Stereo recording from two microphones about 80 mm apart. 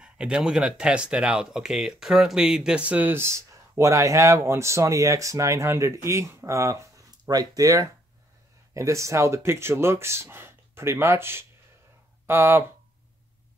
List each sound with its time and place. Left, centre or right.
0.0 s speech: centre; by 6.9 s right
7.2 s speech: right